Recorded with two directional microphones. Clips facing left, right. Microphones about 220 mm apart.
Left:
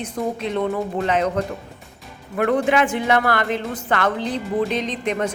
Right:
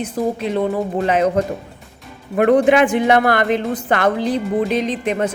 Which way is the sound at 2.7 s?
15° right (ahead or behind).